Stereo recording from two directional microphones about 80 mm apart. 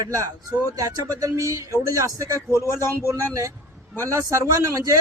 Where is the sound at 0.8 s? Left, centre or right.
Right.